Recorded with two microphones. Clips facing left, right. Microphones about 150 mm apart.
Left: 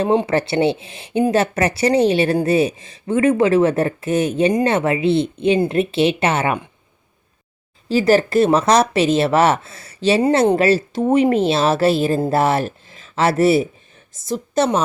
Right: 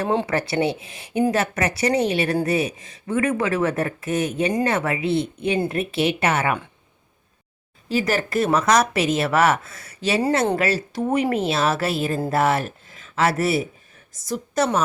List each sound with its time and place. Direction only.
0.0 s speech: 20° left (ahead or behind)
7.9 s speech: 30° left (ahead or behind)